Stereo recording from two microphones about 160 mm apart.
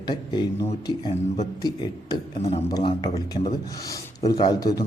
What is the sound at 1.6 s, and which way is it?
A man's voice, 25° left (ahead or behind).